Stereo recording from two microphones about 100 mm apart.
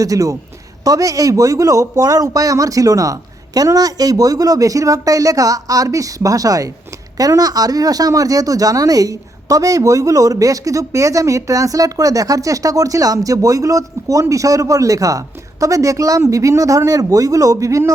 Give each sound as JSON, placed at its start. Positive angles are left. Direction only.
{"t": 0.0, "sound": "speech", "side_deg": -35}